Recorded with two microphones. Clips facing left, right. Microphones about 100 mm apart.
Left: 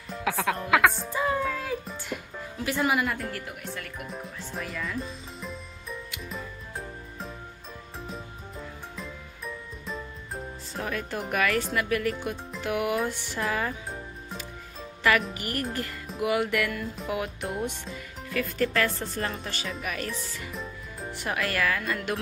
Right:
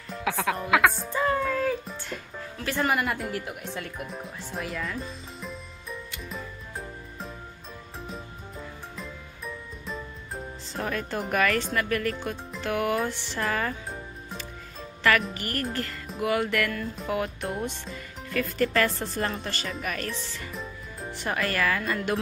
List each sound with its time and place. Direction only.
0.1 s music: centre (ahead or behind)
3.7 s speech: 25° right (ahead or behind)
4.6 s music: centre (ahead or behind)
13.4 s speech: 10° left (ahead or behind)
15.0 s speech: 5° left (ahead or behind)
15.3 s music: 15° left (ahead or behind)
17.8 s speech: centre (ahead or behind)